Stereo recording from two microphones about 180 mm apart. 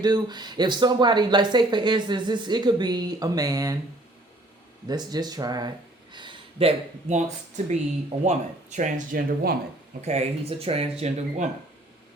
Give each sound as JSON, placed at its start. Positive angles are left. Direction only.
{"t": 0.0, "sound": "speech", "side_deg": -25}
{"t": 4.9, "sound": "speech", "side_deg": -20}
{"t": 10.0, "sound": "speech", "side_deg": -35}